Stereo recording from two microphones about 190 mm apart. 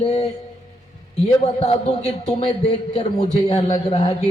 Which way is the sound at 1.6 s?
35° left (ahead or behind).